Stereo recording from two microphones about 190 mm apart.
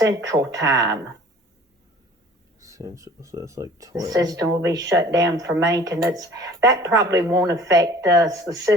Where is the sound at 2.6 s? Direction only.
15° right (ahead or behind).